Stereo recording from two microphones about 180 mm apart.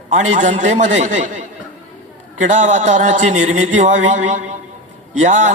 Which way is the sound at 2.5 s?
45° right (ahead or behind).